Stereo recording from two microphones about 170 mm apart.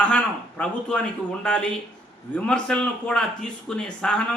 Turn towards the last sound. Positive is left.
turn(degrees=5)  # may be behind; listen again after turning